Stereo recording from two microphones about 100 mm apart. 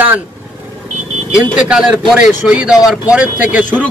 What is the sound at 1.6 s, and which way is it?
Speech, 5° right (ahead or behind).